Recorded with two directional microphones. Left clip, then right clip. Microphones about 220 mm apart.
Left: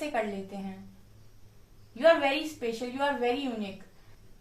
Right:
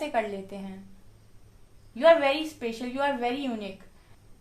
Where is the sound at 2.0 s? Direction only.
45° right (ahead or behind).